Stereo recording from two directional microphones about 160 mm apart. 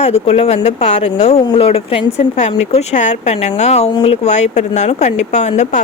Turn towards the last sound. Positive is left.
turn(degrees=45)  # may be behind; listen again after turning